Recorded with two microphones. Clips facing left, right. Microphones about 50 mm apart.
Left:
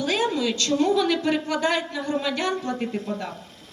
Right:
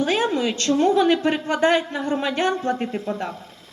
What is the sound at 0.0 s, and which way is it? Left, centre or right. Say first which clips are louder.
Speech: right 3 dB; right.